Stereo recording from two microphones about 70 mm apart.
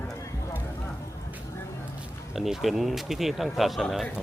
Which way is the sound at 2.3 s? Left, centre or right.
Centre.